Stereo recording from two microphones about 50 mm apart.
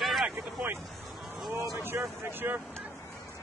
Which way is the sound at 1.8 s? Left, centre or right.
Right.